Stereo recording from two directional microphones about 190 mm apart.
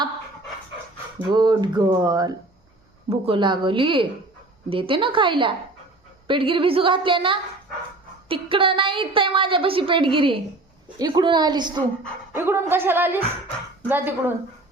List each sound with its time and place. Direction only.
1.3 s a woman's voice: 25° right (ahead or behind)
12.4 s speech: 10° right (ahead or behind)